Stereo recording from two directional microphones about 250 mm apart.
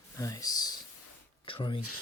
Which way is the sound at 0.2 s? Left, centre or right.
Centre.